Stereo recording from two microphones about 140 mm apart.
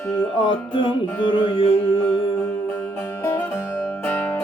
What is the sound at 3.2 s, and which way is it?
Music, 20° left (ahead or behind).